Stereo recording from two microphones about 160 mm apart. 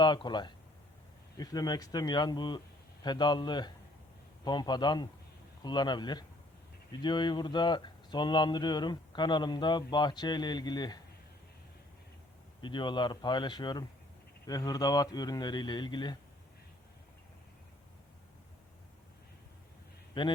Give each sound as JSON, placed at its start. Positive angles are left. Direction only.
{"t": 0.0, "sound": "speech", "side_deg": 30}
{"t": 12.6, "sound": "speech", "side_deg": 30}
{"t": 20.1, "sound": "speech", "side_deg": 30}